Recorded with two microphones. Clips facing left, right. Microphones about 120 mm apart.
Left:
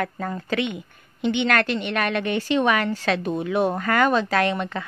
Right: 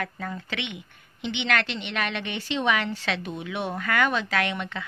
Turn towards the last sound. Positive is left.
turn(degrees=40)  # may be behind; listen again after turning